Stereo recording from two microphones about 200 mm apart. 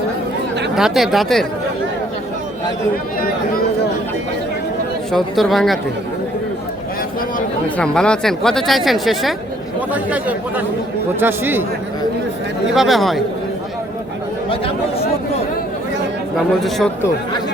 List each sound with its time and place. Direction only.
0.8 s speech: centre (ahead or behind)
5.1 s speech: centre (ahead or behind)
7.8 s speech: 5° left (ahead or behind)
12.7 s speech: centre (ahead or behind)
14.5 s chatter: 30° left (ahead or behind)
16.6 s speech: centre (ahead or behind)